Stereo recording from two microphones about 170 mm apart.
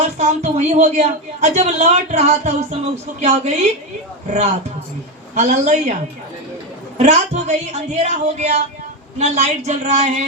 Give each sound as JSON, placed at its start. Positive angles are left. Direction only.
{"t": 0.2, "sound": "a woman's voice", "side_deg": -40}
{"t": 5.3, "sound": "a man's voice", "side_deg": -45}
{"t": 7.0, "sound": "a woman's voice", "side_deg": -40}